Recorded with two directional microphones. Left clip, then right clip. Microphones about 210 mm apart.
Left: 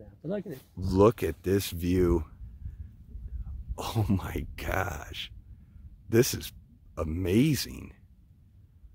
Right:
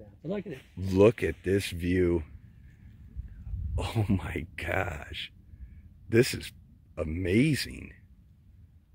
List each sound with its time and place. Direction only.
0.2 s speech: 40° left (ahead or behind)
0.7 s speech: 10° left (ahead or behind)
3.7 s speech: 10° left (ahead or behind)